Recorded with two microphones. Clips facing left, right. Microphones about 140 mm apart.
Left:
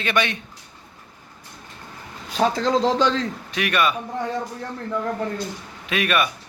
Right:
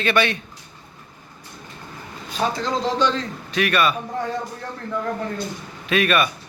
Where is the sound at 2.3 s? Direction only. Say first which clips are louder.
Left 4 dB; 90° left.